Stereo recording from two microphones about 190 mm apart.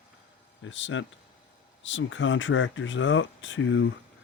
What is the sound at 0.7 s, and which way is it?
Speech, 75° left (ahead or behind).